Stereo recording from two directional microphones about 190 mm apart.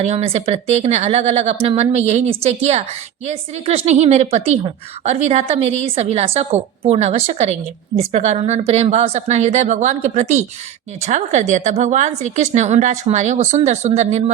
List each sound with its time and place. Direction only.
0.0 s a woman's voice: 35° right (ahead or behind)